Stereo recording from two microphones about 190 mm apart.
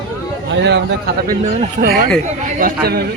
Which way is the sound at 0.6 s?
65° right (ahead or behind).